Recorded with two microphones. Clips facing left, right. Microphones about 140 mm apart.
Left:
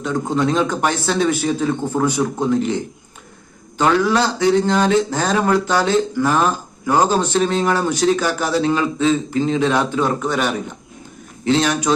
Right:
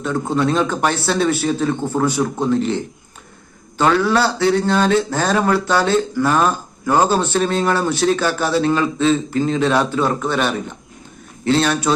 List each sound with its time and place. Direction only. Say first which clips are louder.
0.0 s a man's voice: even; 15° left (ahead or behind)